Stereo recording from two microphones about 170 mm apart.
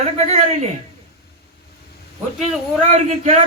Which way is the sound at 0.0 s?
40° right (ahead or behind).